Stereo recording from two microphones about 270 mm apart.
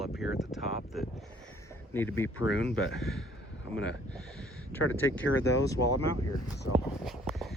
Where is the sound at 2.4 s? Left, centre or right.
Left.